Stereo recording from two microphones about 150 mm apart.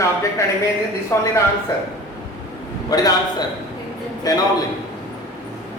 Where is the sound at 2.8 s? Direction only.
25° left (ahead or behind).